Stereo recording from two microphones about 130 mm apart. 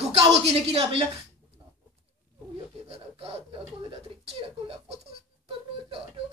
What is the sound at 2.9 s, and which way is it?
Speech, 50° right (ahead or behind).